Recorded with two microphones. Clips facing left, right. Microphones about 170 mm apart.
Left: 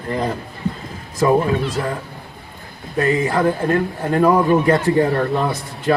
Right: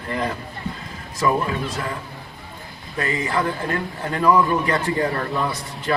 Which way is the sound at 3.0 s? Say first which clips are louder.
Left 6 dB; 45° left (ahead or behind).